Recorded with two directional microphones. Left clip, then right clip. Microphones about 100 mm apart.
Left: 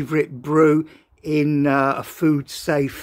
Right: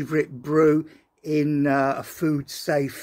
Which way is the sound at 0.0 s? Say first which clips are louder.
Left 3 dB; 40° left (ahead or behind).